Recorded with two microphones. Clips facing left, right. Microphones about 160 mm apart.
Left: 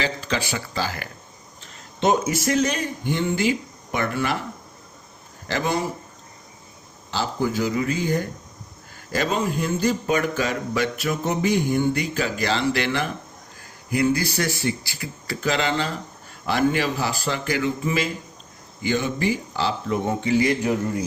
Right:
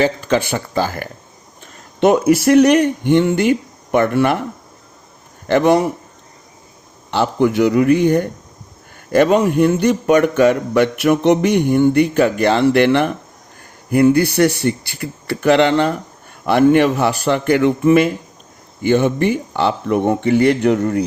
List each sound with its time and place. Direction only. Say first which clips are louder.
0.0 s speech: right 10 dB; 50° right (ahead or behind)
1.6 s speech: right 7 dB; 60° right (ahead or behind)
5.5 s a man's voice: right 11 dB; 65° right (ahead or behind)
7.1 s a man's voice: right 9 dB; 65° right (ahead or behind)